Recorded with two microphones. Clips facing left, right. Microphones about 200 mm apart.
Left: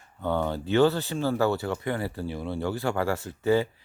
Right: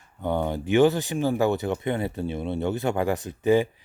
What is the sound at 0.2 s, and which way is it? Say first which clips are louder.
Speech: right 1 dB; 15° right (ahead or behind).